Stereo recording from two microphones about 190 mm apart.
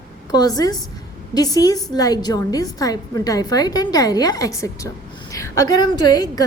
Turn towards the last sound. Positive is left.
turn(degrees=20)  # may be behind; listen again after turning